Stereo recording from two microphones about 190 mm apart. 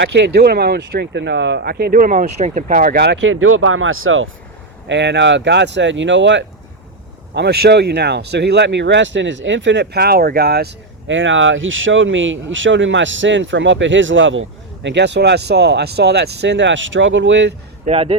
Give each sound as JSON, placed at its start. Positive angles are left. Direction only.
{"t": 0.0, "sound": "speech", "side_deg": -65}
{"t": 4.9, "sound": "speech", "side_deg": -65}
{"t": 7.3, "sound": "speech", "side_deg": -60}
{"t": 14.8, "sound": "speech", "side_deg": -65}
{"t": 17.8, "sound": "speech", "side_deg": -30}